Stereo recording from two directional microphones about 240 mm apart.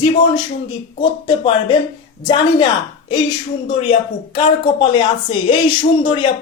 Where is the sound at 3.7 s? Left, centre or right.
Left.